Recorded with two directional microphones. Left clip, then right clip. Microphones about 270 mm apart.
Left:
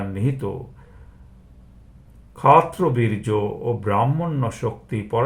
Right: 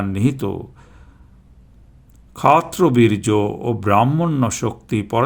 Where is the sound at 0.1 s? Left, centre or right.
Right.